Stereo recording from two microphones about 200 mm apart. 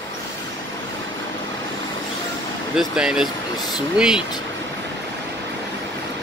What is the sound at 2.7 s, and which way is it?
Speech, 5° right (ahead or behind).